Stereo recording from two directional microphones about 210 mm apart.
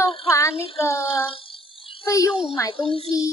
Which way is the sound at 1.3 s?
25° left (ahead or behind).